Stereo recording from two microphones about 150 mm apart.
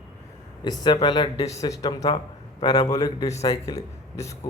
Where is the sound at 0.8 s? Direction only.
30° left (ahead or behind).